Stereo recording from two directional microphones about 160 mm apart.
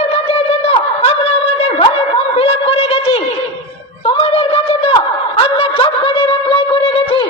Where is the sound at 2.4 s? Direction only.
35° left (ahead or behind).